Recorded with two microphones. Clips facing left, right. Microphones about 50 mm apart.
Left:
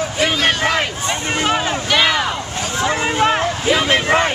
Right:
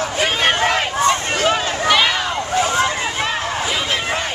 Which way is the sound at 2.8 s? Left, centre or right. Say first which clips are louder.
Left 4 dB; left.